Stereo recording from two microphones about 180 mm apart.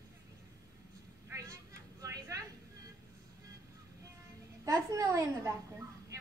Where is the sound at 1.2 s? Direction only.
15° right (ahead or behind).